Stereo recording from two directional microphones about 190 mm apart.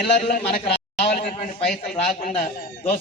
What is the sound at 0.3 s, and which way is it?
A man's voice, 50° left (ahead or behind).